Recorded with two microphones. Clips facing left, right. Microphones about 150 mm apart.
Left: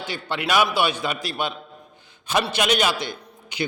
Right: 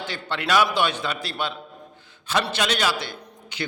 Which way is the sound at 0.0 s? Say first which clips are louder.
Left 1 dB; 10° left (ahead or behind).